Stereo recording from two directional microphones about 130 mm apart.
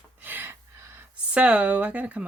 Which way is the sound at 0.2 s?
15° right (ahead or behind).